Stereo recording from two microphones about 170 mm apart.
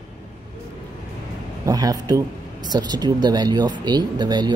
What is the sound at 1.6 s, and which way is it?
Speech, 20° right (ahead or behind).